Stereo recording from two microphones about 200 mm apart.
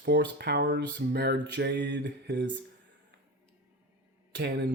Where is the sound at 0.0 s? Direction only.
60° right (ahead or behind).